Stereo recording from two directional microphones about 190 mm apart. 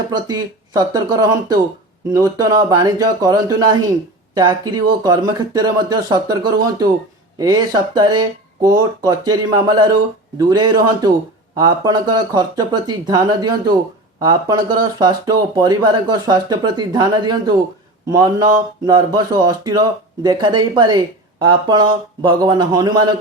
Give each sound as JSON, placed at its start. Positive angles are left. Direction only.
{"t": 0.1, "sound": "speech", "side_deg": -20}
{"t": 18.9, "sound": "speech", "side_deg": -20}